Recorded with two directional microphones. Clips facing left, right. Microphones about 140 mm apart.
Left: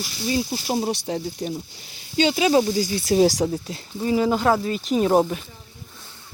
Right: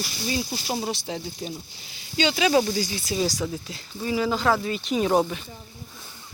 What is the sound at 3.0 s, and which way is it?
Speech, 70° left (ahead or behind).